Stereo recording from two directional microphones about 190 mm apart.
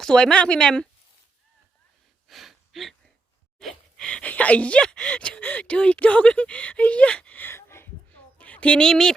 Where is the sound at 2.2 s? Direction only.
Centre (ahead or behind).